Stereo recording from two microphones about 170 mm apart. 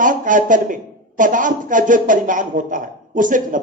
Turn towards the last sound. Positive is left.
turn(degrees=-50)  # may be behind; listen again after turning